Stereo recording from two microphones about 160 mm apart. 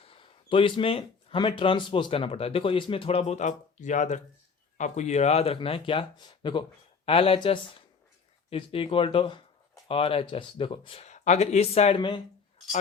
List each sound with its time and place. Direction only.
0.0 s speech: 35° left (ahead or behind)